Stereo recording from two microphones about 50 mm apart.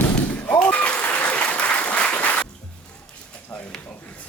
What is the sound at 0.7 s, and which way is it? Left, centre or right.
Applause, left.